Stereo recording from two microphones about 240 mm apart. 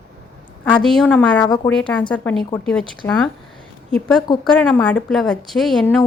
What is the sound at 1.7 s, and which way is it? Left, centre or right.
A woman's voice, centre.